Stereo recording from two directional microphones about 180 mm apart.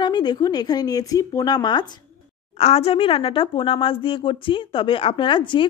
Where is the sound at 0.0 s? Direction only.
25° left (ahead or behind).